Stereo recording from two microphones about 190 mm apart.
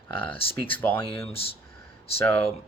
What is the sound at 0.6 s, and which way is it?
Speech, 10° left (ahead or behind).